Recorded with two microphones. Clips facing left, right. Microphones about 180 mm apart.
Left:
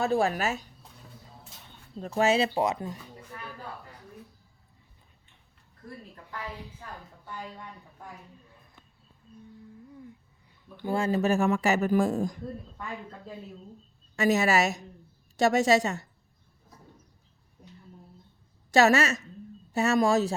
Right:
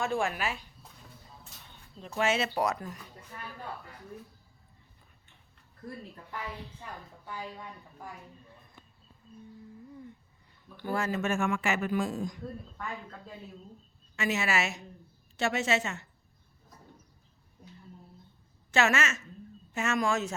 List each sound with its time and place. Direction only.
0.0 s speech: 35° left (ahead or behind)
2.0 s speech: 35° left (ahead or behind)
6.6 s a woman's voice: 10° left (ahead or behind)
10.8 s speech: 25° left (ahead or behind); by 12.3 s 50° left (ahead or behind)
14.2 s speech: 40° left (ahead or behind)
18.7 s speech: 40° left (ahead or behind)